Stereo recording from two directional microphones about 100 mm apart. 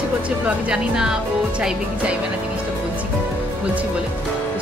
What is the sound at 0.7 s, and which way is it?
Speech, 5° right (ahead or behind).